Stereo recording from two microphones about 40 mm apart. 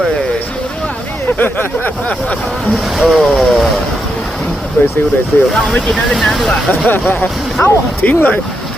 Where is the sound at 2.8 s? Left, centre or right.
Centre.